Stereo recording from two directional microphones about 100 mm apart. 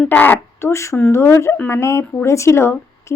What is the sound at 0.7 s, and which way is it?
A woman's voice, 30° left (ahead or behind).